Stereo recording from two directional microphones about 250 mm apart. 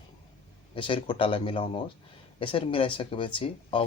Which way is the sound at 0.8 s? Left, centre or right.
Left.